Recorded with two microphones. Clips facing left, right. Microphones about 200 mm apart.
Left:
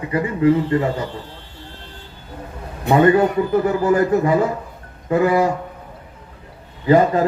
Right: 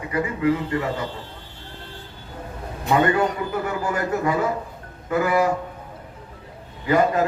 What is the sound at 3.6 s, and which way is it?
A man's voice, 30° left (ahead or behind).